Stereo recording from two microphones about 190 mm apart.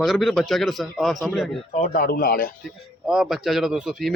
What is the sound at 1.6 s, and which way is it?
Speech, 35° left (ahead or behind).